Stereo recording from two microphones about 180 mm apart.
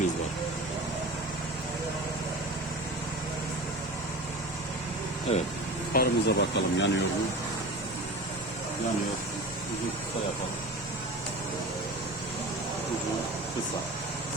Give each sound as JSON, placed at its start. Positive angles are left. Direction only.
{"t": 5.3, "sound": "speech", "side_deg": 35}
{"t": 5.9, "sound": "speech", "side_deg": 65}